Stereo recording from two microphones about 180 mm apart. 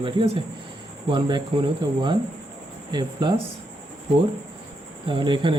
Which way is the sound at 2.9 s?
25° right (ahead or behind).